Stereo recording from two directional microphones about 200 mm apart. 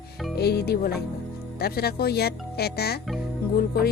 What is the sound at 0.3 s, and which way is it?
Music, 55° left (ahead or behind).